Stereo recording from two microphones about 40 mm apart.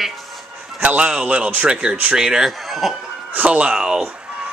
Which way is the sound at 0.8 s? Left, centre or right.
Right.